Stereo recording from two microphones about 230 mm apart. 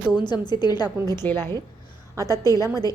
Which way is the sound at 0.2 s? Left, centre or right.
Centre.